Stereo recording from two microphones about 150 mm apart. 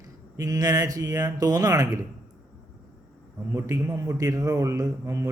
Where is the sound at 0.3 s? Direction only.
25° right (ahead or behind).